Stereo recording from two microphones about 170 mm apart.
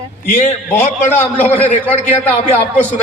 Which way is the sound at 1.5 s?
40° left (ahead or behind).